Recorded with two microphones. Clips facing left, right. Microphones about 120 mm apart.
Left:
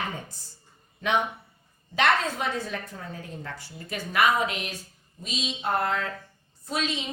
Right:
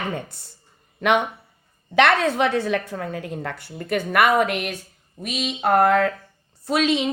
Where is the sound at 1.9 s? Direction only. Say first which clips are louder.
Right 7 dB; 75° right (ahead or behind).